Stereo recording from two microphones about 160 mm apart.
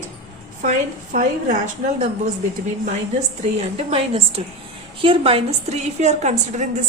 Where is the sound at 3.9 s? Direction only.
35° right (ahead or behind).